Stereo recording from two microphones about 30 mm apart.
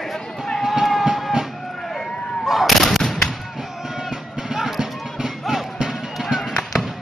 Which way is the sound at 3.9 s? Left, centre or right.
Centre.